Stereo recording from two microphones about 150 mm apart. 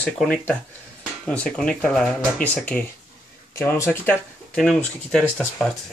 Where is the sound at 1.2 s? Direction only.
5° left (ahead or behind).